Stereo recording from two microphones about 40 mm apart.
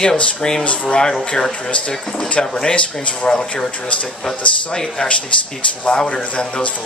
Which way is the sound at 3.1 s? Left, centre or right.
Left.